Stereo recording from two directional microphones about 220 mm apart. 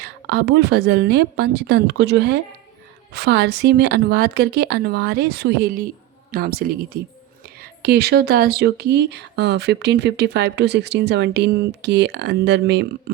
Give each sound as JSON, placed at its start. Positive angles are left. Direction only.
{"t": 0.0, "sound": "speech", "side_deg": -50}